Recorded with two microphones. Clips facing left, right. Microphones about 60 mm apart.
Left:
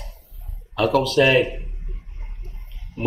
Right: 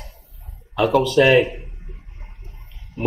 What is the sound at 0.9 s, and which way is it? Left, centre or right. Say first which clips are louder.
Speech: right 2 dB; centre.